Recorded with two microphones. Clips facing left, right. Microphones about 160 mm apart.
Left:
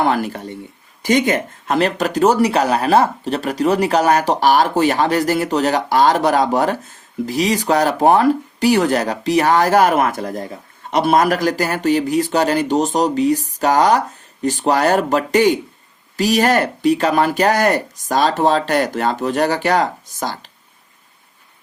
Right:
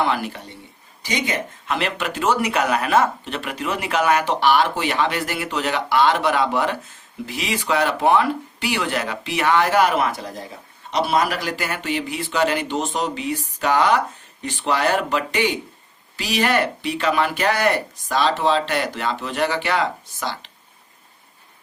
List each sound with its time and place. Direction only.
0.0 s speech: 45° left (ahead or behind)